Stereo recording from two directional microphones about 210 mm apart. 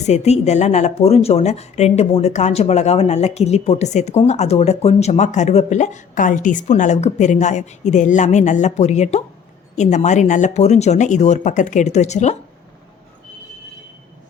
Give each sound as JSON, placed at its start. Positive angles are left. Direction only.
{"t": 0.1, "sound": "a woman's voice", "side_deg": 30}